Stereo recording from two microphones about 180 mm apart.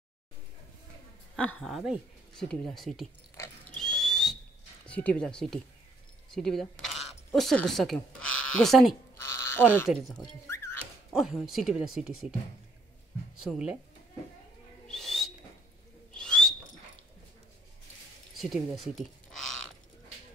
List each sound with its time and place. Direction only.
1.3 s speech: 5° left (ahead or behind)
3.8 s whistle: centre (ahead or behind)
4.8 s speech: 5° left (ahead or behind)
9.1 s a sound: 15° left (ahead or behind)
10.5 s dog: 15° left (ahead or behind)
11.1 s speech: 5° right (ahead or behind)
13.4 s speech: 5° right (ahead or behind)
14.9 s whistling: centre (ahead or behind)
16.1 s owl: 5° left (ahead or behind)
18.4 s speech: centre (ahead or behind)